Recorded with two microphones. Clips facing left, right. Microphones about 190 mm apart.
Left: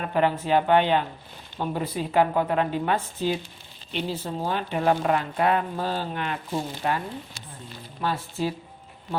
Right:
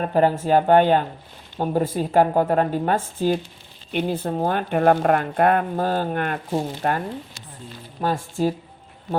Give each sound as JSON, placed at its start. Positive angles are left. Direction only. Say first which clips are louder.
{"t": 0.0, "sound": "speech", "louder": "right 5 dB", "side_deg": -40}
{"t": 8.0, "sound": "speech", "louder": "right 5 dB", "side_deg": -45}